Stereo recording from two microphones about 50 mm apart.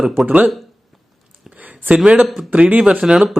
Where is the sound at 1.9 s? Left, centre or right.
Centre.